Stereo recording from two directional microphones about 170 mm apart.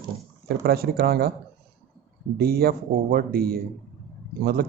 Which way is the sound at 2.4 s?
65° right (ahead or behind).